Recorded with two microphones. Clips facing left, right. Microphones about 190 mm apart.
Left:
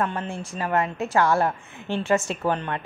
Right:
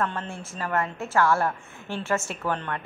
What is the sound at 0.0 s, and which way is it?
A woman's voice, 15° left (ahead or behind).